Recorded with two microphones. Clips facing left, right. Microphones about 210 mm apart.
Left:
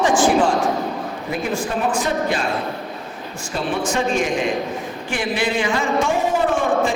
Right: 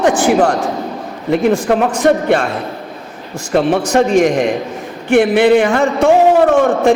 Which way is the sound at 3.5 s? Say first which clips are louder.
Right 10 dB; 70° right (ahead or behind).